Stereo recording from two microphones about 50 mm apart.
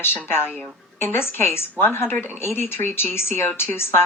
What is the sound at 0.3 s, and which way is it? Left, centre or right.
A woman's voice, left.